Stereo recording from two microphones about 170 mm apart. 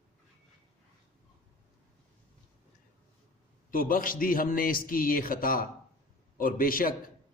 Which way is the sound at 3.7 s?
55° left (ahead or behind).